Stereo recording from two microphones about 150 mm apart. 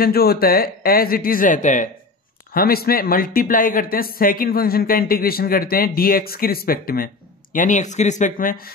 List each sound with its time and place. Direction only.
0.0 s a man's voice: 90° left; by 1.9 s 60° left (ahead or behind)
2.5 s a man's voice: 85° left
7.5 s speech: 55° left (ahead or behind); by 8.7 s 75° left (ahead or behind)